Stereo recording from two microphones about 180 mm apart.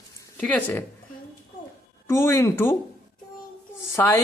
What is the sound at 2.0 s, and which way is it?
Speech, 15° left (ahead or behind).